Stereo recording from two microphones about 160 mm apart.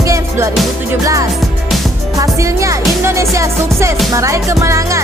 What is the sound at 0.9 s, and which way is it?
Speech, 20° right (ahead or behind).